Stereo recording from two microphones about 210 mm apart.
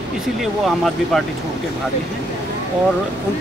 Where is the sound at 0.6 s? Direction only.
Centre (ahead or behind).